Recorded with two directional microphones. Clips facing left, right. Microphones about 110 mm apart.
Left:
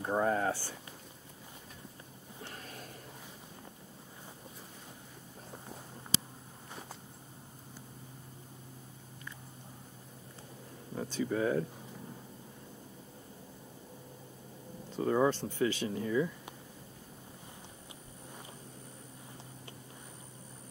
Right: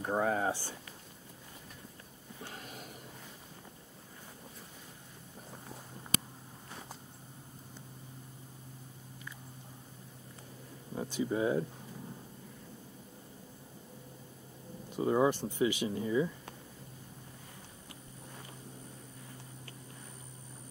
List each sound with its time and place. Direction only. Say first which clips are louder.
0.0 s speech: left 1 dB; 5° right (ahead or behind)
2.4 s a sound: right 1 dB; 20° right (ahead or behind)
11.0 s speech: even; 15° right (ahead or behind)
14.9 s speech: even; 15° right (ahead or behind)